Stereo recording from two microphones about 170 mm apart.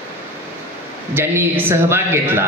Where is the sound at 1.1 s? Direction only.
10° right (ahead or behind).